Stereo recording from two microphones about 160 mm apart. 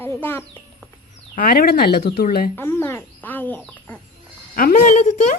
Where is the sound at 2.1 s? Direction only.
70° left (ahead or behind).